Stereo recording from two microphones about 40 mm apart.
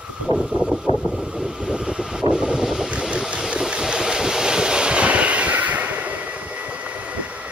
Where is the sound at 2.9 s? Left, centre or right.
Right.